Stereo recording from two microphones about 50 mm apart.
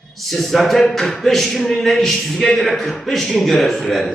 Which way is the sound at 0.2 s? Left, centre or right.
Centre.